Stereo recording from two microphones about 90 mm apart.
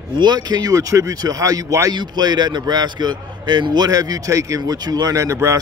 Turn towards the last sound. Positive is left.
turn(degrees=-35)  # may be behind; listen again after turning